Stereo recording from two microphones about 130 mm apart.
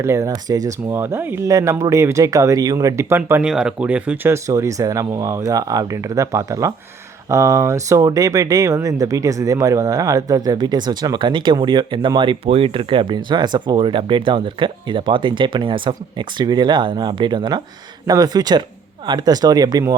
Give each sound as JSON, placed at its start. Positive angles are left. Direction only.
{"t": 0.0, "sound": "speech", "side_deg": -20}
{"t": 3.4, "sound": "speech", "side_deg": -5}